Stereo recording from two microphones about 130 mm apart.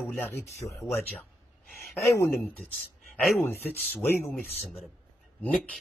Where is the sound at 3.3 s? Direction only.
15° left (ahead or behind).